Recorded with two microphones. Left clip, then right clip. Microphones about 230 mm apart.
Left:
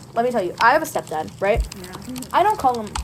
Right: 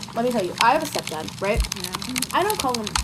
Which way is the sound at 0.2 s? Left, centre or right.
Left.